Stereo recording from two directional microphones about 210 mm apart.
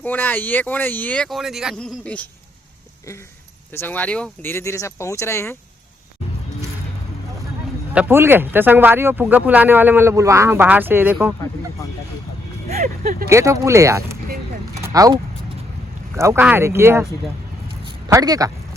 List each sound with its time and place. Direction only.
0.0 s speech: 10° left (ahead or behind)
3.8 s speech: 10° left (ahead or behind)
7.9 s speech: 10° right (ahead or behind)
12.6 s a sound: 35° right (ahead or behind)
13.2 s speech: 15° right (ahead or behind)
14.8 s vehicle: 15° right (ahead or behind)
16.1 s speech: 10° right (ahead or behind)
18.1 s speech: 15° right (ahead or behind)